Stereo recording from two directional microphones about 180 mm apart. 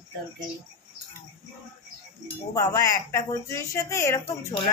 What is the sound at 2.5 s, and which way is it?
Speech, 20° left (ahead or behind).